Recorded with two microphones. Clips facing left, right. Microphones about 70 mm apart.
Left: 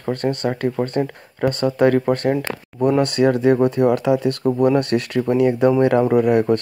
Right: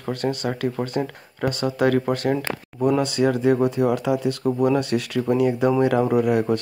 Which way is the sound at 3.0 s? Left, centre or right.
Left.